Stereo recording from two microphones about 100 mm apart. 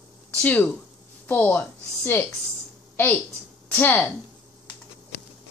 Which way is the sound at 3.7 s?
15° left (ahead or behind).